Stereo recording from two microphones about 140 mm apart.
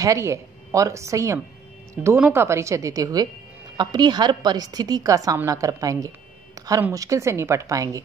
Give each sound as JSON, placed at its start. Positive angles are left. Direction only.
{"t": 0.0, "sound": "a woman's voice", "side_deg": -20}
{"t": 2.0, "sound": "a woman's voice", "side_deg": -10}